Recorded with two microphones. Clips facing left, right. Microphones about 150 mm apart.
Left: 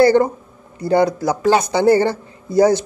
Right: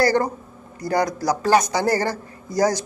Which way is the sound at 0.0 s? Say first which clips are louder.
Left 7 dB; 25° left (ahead or behind).